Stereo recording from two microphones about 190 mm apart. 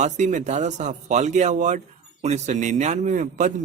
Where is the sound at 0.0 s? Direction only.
40° right (ahead or behind).